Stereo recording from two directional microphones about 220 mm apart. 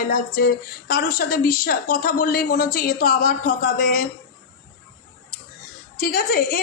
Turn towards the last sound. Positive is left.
turn(degrees=40)  # may be behind; listen again after turning